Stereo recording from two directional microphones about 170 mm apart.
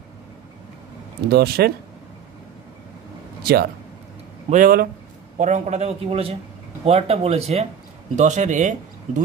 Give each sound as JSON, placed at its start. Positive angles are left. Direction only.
{"t": 1.3, "sound": "speech", "side_deg": -65}
{"t": 3.4, "sound": "speech", "side_deg": -65}
{"t": 4.5, "sound": "a man's voice", "side_deg": -55}